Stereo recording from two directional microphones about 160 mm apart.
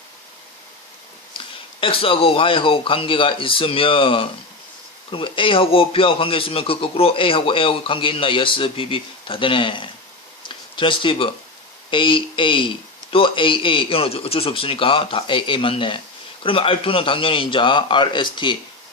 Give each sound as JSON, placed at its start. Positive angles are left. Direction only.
{"t": 1.8, "sound": "a man's voice", "side_deg": 35}